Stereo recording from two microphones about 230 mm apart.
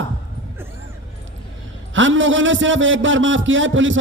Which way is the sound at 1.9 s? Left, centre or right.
Right.